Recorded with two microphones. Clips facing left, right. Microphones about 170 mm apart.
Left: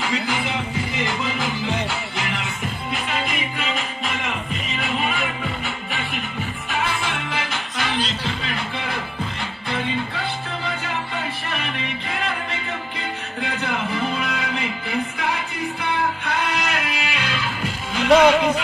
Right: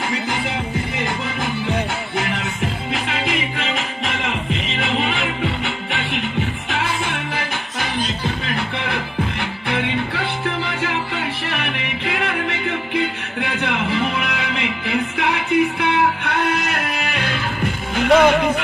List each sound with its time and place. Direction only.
0.9 s music: 55° right (ahead or behind)
3.7 s music: 70° right (ahead or behind)
7.0 s music: 60° right (ahead or behind)